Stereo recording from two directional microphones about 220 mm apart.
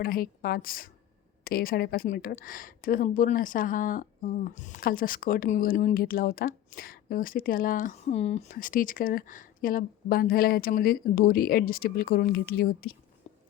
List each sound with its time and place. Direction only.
0.0 s a woman's voice: 40° left (ahead or behind)